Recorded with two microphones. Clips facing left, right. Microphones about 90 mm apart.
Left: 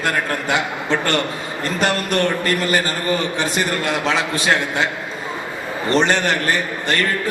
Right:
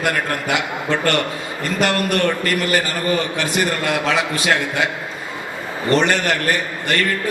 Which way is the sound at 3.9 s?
25° left (ahead or behind).